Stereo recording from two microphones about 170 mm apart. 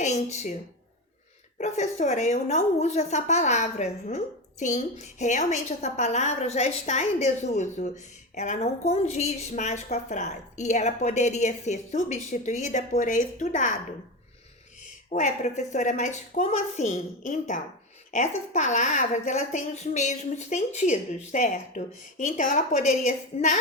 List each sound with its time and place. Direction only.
0.0 s a woman's voice: 40° left (ahead or behind)
1.5 s a woman's voice: 45° left (ahead or behind)
14.8 s a woman's voice: 45° left (ahead or behind)